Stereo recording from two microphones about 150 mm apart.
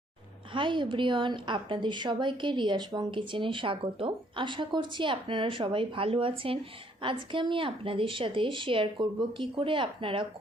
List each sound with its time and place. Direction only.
0.5 s a woman's voice: 35° right (ahead or behind)